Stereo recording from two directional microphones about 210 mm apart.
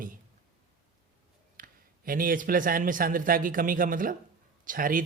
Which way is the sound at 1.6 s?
40° right (ahead or behind).